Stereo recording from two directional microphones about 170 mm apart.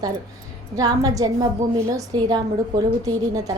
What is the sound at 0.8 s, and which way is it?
A woman's voice, 20° right (ahead or behind).